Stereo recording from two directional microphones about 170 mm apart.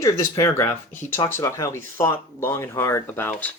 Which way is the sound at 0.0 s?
20° left (ahead or behind).